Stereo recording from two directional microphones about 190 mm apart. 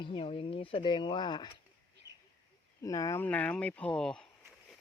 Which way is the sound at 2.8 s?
15° left (ahead or behind).